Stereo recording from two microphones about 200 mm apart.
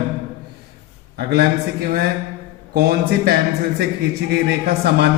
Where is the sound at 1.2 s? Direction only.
55° right (ahead or behind).